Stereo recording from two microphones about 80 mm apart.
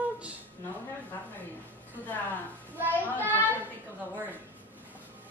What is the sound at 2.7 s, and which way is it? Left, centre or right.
Children playing, right.